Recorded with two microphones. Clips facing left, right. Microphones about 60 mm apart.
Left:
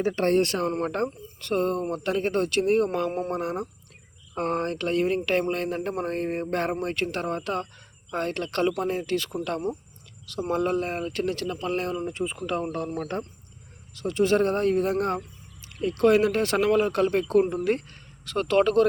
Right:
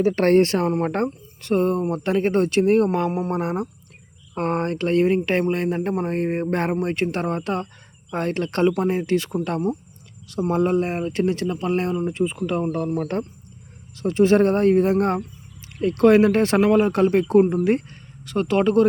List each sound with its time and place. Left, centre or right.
0.2 s speech: right
3.1 s speech: centre
3.3 s speech: right; by 6.1 s centre
6.1 s speech: right
10.5 s speech: right
12.2 s speech: centre
12.5 s speech: centre
14.0 s speech: right
18.3 s speech: centre